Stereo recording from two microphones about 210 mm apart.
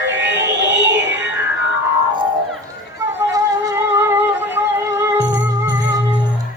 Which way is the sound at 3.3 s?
15° right (ahead or behind).